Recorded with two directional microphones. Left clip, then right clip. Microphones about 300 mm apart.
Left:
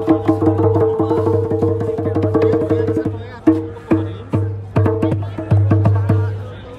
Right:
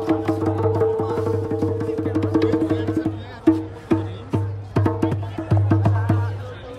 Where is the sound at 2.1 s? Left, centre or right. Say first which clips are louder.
Left 5 dB; centre.